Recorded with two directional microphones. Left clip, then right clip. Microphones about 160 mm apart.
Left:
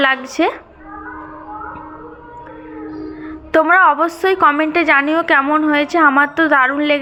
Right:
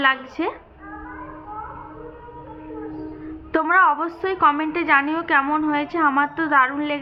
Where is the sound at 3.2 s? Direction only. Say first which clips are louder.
Left 9 dB; 35° left (ahead or behind).